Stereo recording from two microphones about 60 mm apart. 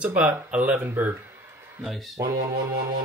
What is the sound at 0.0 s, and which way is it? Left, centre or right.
Speech, right.